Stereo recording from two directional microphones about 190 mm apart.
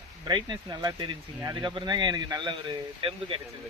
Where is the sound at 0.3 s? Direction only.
20° right (ahead or behind).